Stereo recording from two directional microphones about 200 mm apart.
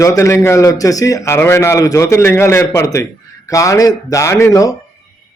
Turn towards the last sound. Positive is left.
turn(degrees=15)  # may be behind; listen again after turning